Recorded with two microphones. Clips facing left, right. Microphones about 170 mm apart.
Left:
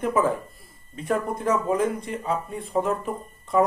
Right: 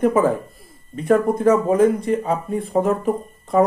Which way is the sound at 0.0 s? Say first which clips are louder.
Right 6 dB; 40° right (ahead or behind).